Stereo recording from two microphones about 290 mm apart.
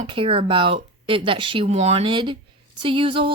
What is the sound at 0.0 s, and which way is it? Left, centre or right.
A woman's voice, centre.